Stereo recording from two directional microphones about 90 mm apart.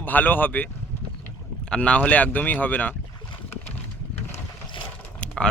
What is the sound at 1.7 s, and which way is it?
Speech, 15° left (ahead or behind).